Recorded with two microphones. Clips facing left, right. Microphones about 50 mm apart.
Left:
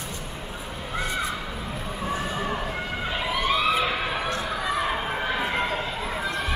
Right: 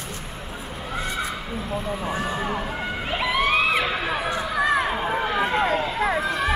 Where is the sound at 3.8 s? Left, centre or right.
Centre.